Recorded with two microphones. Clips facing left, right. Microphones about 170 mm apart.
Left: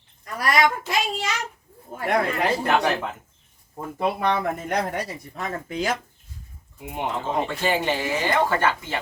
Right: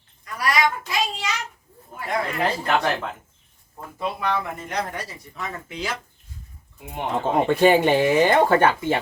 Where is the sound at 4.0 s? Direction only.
55° left (ahead or behind).